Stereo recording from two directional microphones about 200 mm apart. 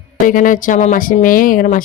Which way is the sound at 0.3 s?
40° left (ahead or behind).